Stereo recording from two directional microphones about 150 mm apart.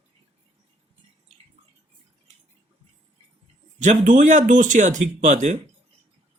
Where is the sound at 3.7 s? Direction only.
55° right (ahead or behind).